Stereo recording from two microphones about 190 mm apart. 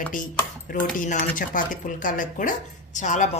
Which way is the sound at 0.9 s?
45° left (ahead or behind).